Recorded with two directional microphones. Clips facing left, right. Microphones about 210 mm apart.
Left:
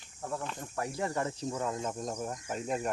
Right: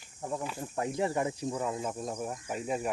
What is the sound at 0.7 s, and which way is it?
Speech, 20° right (ahead or behind).